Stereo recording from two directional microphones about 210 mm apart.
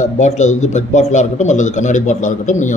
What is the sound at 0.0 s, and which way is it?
Speech, 35° left (ahead or behind).